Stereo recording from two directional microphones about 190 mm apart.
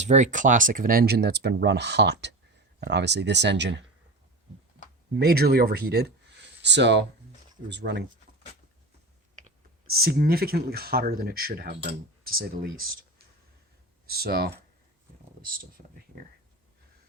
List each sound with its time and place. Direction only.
0.0 s speech: 40° right (ahead or behind); by 3.8 s 65° right (ahead or behind)
5.2 s speech: 55° right (ahead or behind)
9.8 s speech: 55° right (ahead or behind)
14.2 s speech: 55° right (ahead or behind)
15.8 s speech: 40° right (ahead or behind)